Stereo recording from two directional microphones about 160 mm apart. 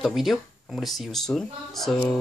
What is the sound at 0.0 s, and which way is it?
Speech, centre (ahead or behind).